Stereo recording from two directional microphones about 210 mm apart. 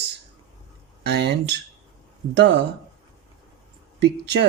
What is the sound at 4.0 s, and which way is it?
Speech, 50° right (ahead or behind).